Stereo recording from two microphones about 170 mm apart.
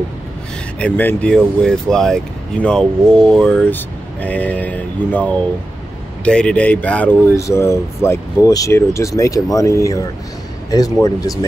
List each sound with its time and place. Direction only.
0.7 s a man's voice: 10° left (ahead or behind)